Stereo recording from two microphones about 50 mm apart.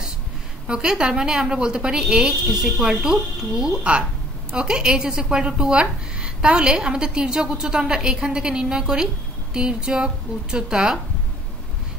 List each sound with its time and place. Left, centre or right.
0.7 s speech: centre